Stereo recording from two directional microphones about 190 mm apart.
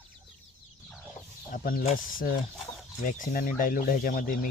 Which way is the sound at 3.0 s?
45° left (ahead or behind).